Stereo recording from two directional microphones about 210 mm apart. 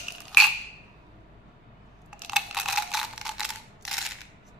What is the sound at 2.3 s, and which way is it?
Camera, centre (ahead or behind).